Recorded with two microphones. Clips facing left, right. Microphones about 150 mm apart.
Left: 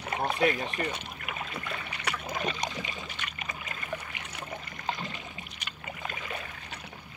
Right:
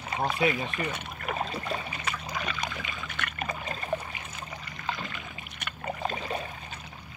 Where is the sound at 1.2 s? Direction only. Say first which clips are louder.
Right 9 dB; 40° right (ahead or behind).